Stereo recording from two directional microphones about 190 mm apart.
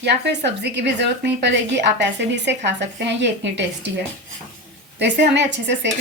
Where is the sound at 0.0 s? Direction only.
65° right (ahead or behind).